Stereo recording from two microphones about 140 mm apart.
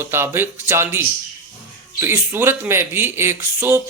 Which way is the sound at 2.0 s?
15° right (ahead or behind).